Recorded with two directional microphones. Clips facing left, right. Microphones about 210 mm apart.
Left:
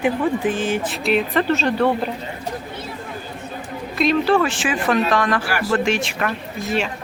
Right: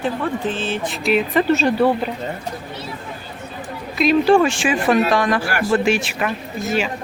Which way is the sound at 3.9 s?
Centre (ahead or behind).